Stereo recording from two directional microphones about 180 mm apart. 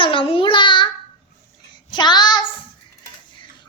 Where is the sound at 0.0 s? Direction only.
30° left (ahead or behind).